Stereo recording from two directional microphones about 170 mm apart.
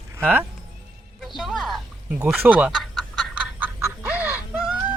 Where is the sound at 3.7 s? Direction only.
10° right (ahead or behind).